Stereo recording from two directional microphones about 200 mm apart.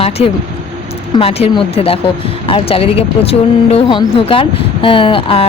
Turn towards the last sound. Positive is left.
turn(degrees=25)  # may be behind; listen again after turning